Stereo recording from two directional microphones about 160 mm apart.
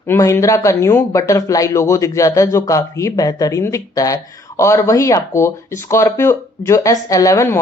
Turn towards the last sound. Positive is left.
turn(degrees=20)  # may be behind; listen again after turning